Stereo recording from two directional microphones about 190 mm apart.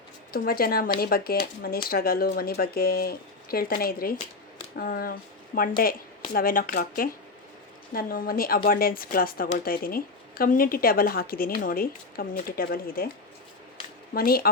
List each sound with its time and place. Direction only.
0.3 s speech: 50° left (ahead or behind)
14.1 s speech: 50° left (ahead or behind)